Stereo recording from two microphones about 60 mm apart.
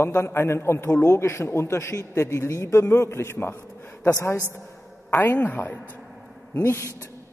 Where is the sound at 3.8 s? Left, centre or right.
Left.